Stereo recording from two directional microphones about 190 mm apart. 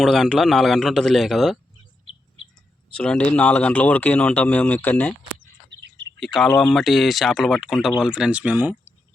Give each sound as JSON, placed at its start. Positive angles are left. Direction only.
{"t": 0.0, "sound": "speech", "side_deg": 0}
{"t": 2.9, "sound": "speech", "side_deg": 5}
{"t": 6.1, "sound": "speech", "side_deg": 0}